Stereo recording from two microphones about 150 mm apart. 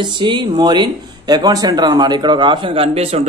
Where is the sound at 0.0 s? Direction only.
30° right (ahead or behind).